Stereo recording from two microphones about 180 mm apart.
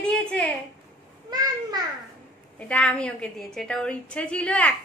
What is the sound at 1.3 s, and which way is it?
Speech, 20° right (ahead or behind).